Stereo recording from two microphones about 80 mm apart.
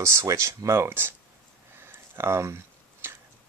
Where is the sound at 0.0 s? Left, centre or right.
Right.